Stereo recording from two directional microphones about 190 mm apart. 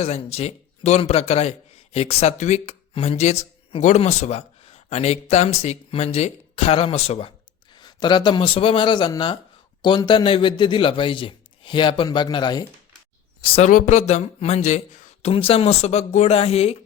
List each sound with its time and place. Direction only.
0.0 s a man's voice: 35° left (ahead or behind)
13.7 s speech: 40° left (ahead or behind)